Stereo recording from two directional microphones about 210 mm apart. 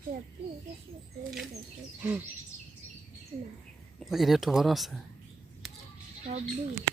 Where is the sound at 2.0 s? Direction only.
10° right (ahead or behind).